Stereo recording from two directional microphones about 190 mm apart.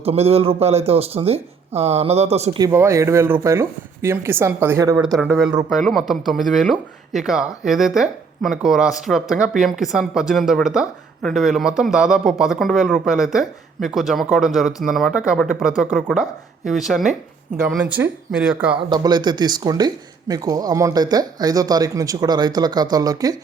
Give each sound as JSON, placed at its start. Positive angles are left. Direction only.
{"t": 0.0, "sound": "speech", "side_deg": -30}
{"t": 2.6, "sound": "speech", "side_deg": -15}
{"t": 5.6, "sound": "speech", "side_deg": 0}
{"t": 18.9, "sound": "speech", "side_deg": -20}